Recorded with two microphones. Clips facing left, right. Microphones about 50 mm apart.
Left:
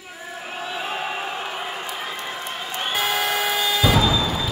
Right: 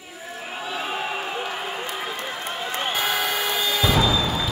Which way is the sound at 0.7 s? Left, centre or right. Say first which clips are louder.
Even; centre.